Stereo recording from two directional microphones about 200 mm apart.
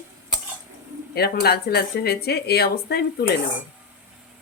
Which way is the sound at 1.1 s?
50° left (ahead or behind).